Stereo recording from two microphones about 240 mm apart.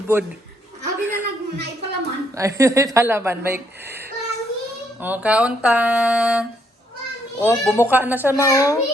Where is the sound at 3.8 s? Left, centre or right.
Right.